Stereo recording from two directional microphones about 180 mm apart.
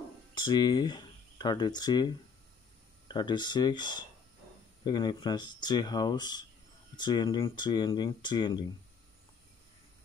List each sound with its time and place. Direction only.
0.3 s speech: 25° left (ahead or behind)